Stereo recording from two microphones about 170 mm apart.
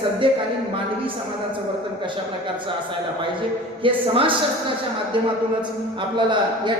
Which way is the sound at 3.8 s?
30° right (ahead or behind).